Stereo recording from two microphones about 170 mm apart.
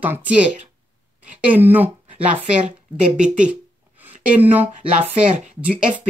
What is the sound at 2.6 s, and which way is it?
Speech, 45° right (ahead or behind).